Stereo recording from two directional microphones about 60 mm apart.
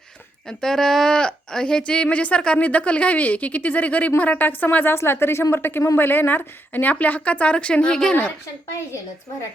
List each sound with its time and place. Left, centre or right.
0.4 s a woman's voice: centre